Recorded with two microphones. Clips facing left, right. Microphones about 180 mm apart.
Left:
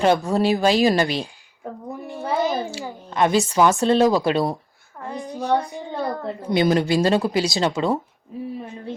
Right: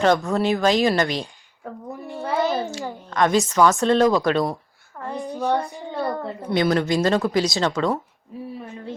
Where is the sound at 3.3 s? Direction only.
25° left (ahead or behind).